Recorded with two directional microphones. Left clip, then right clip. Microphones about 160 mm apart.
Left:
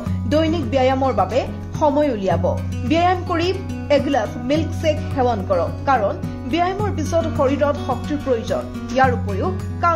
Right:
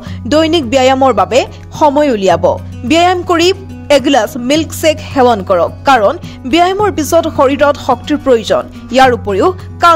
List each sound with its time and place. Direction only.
0.3 s speech: 50° right (ahead or behind)